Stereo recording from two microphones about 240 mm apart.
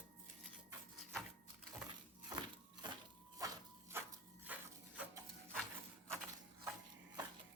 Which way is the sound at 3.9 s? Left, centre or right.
Centre.